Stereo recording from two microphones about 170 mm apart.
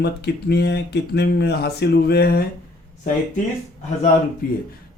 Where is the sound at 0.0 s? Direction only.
75° left (ahead or behind).